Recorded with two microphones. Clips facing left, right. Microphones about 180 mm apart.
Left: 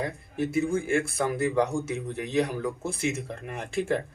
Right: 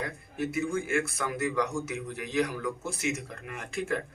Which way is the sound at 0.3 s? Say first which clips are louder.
Left 4 dB; 30° left (ahead or behind).